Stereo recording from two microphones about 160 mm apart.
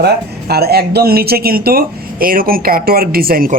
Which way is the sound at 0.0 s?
80° right.